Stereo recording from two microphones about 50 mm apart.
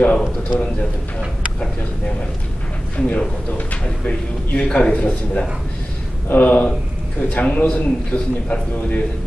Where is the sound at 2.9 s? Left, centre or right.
Left.